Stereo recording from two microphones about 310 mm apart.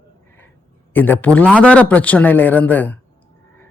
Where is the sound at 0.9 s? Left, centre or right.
Centre.